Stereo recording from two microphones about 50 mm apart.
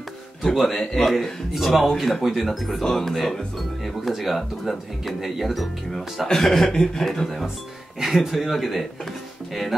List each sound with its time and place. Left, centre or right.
0.6 s speech: centre
7.0 s speech: centre